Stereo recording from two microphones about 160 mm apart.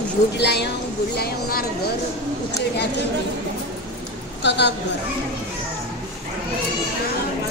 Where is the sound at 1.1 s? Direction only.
75° left (ahead or behind).